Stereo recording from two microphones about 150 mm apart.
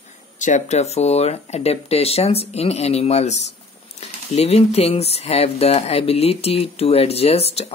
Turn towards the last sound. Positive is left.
turn(degrees=45)  # may be behind; listen again after turning